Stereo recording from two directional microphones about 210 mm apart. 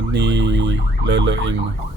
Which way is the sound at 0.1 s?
55° right (ahead or behind).